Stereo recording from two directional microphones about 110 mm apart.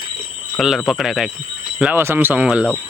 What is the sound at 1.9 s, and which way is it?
Speech, 20° right (ahead or behind).